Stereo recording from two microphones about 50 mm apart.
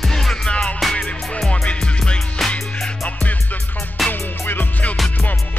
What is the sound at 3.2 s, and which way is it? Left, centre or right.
Music, left.